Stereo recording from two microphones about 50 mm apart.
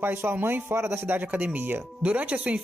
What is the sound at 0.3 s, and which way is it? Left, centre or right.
Speech, right.